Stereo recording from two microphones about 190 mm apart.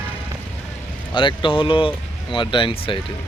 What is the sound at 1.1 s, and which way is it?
Speech, 25° left (ahead or behind).